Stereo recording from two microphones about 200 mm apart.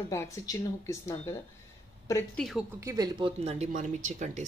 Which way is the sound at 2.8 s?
20° right (ahead or behind).